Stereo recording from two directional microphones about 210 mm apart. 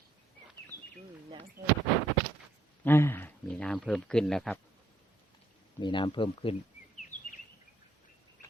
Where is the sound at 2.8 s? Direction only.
10° left (ahead or behind).